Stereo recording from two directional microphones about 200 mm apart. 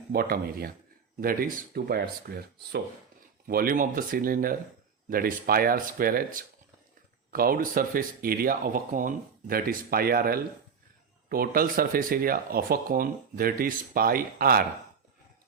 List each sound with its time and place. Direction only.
0.1 s speech: 50° right (ahead or behind)